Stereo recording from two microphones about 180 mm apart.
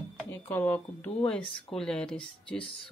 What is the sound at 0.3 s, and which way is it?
Speech, 10° left (ahead or behind).